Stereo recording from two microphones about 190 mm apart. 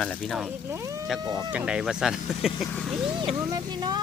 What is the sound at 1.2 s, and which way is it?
Speech, 20° right (ahead or behind).